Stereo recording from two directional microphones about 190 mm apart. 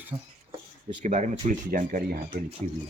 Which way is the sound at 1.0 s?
40° right (ahead or behind).